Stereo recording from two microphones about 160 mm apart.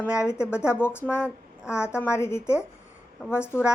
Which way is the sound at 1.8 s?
5° right (ahead or behind).